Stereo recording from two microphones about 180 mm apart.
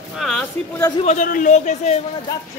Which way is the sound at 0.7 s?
20° left (ahead or behind).